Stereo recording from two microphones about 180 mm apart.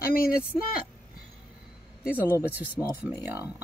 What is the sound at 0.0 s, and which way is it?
Speech, 55° left (ahead or behind).